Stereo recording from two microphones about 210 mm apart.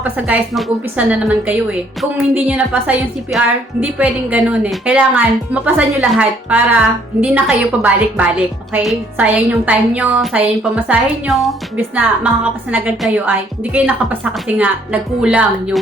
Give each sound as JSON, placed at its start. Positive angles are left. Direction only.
{"t": 0.0, "sound": "a woman's voice", "side_deg": -5}